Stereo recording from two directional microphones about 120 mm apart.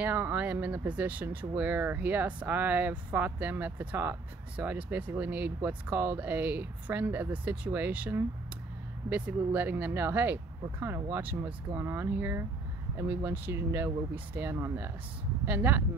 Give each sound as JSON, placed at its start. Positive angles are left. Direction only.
{"t": 0.0, "sound": "speech", "side_deg": -15}